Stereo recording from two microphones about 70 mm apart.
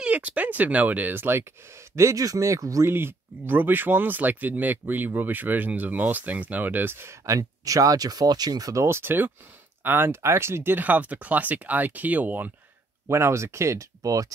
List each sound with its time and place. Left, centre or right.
0.0 s speech: centre; by 2.9 s right
2.9 s speech: right
8.8 s speech: right
13.1 s speech: right